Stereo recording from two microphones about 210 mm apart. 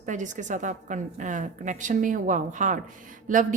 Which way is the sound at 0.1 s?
35° right (ahead or behind).